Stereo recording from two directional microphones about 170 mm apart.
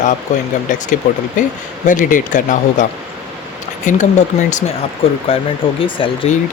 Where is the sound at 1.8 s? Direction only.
45° left (ahead or behind).